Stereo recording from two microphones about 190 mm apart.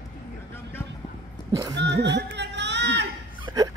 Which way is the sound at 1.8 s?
65° right (ahead or behind).